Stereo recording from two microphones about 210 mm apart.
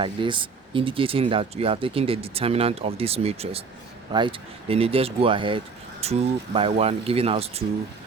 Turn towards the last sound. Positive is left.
turn(degrees=-30)  # may be behind; listen again after turning